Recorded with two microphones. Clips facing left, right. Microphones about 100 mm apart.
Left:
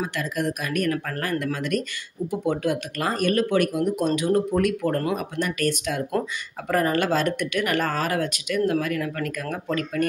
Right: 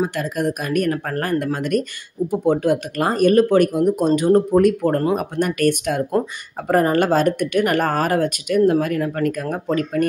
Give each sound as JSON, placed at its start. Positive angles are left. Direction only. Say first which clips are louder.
{"t": 0.0, "sound": "speech", "louder": "right 5 dB", "side_deg": -45}
{"t": 5.4, "sound": "speech", "louder": "right 7 dB", "side_deg": -50}